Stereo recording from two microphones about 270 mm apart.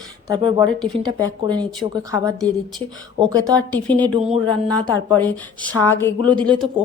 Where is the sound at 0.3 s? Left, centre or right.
Centre.